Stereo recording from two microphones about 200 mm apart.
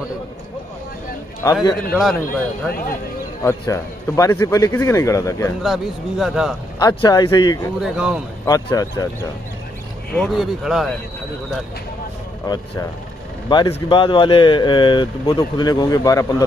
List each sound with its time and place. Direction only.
1.4 s speech: 20° left (ahead or behind)
1.9 s speech: centre (ahead or behind)
3.4 s a man's voice: 15° left (ahead or behind)
5.6 s speech: centre (ahead or behind)
6.8 s speech: 20° left (ahead or behind)
7.8 s speech: 5° right (ahead or behind)
8.5 s speech: 20° left (ahead or behind)
10.1 s speech: centre (ahead or behind)
12.5 s speech: 20° left (ahead or behind)